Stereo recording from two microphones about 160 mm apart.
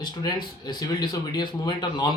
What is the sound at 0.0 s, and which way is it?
Speech, 25° left (ahead or behind).